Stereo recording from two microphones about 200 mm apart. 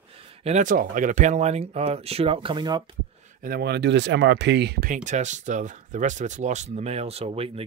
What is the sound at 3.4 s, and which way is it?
Speech, 50° right (ahead or behind).